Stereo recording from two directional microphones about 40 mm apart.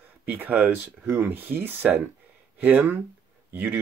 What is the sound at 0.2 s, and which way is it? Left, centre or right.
Speech, right.